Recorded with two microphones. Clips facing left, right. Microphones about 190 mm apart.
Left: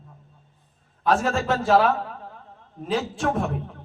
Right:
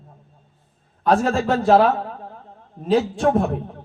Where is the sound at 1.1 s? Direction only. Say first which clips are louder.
Right 4 dB; 35° right (ahead or behind).